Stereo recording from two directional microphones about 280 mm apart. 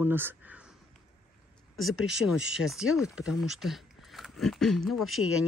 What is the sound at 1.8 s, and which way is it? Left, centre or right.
Speech, centre.